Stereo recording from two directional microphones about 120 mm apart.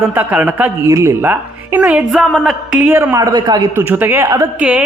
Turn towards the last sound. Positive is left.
turn(degrees=-10)  # may be behind; listen again after turning